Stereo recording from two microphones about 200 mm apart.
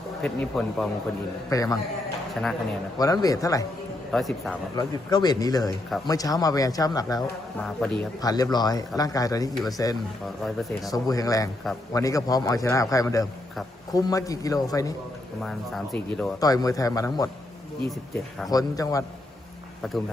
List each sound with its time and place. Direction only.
0.2 s speech: centre (ahead or behind)
1.5 s a man's voice: 15° left (ahead or behind)
2.3 s speech: centre (ahead or behind)
3.0 s a man's voice: 20° left (ahead or behind)
4.1 s speech: centre (ahead or behind)
4.8 s a man's voice: 20° left (ahead or behind)
10.4 s speech: centre (ahead or behind)
10.9 s a man's voice: 15° left (ahead or behind)
15.4 s speech: centre (ahead or behind)
16.4 s a man's voice: 20° left (ahead or behind)
18.4 s a man's voice: 15° left (ahead or behind)